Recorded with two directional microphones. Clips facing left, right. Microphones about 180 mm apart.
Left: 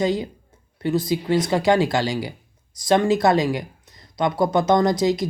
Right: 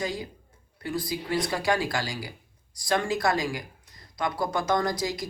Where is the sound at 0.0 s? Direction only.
25° left (ahead or behind).